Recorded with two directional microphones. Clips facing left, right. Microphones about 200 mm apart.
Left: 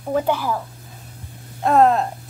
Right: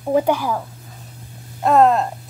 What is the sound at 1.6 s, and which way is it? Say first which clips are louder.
Speech: right 1 dB; centre (ahead or behind).